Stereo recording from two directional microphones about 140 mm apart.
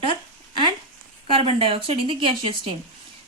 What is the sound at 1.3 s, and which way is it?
A woman's voice, 40° right (ahead or behind).